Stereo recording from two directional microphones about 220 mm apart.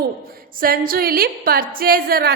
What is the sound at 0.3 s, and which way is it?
A woman's voice, 40° right (ahead or behind).